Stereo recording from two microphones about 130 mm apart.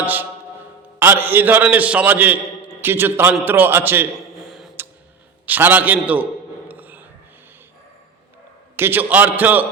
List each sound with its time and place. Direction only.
0.0 s a man's voice: 15° right (ahead or behind)
4.4 s a sound: centre (ahead or behind)
5.5 s a man's voice: 15° right (ahead or behind)
6.7 s filing: 15° right (ahead or behind)
8.7 s a man's voice: 15° right (ahead or behind)